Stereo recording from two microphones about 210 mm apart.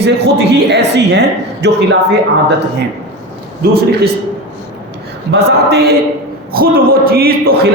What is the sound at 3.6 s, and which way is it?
Speech, 45° right (ahead or behind).